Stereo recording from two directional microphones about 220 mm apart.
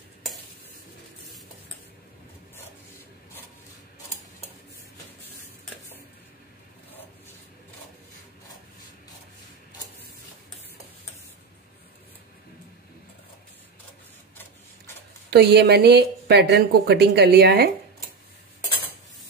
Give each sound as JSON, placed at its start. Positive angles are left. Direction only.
{"t": 15.2, "sound": "speech", "side_deg": -45}